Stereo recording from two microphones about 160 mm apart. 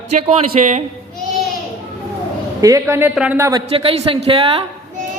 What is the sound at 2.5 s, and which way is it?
A man's voice, 20° right (ahead or behind).